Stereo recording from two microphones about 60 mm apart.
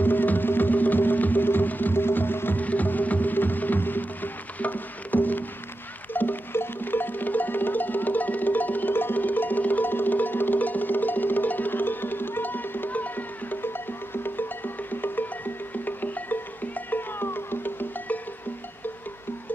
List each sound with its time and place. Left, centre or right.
0.0 s music: left